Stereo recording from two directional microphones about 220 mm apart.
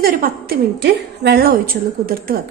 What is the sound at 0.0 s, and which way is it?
A woman's voice, 45° right (ahead or behind).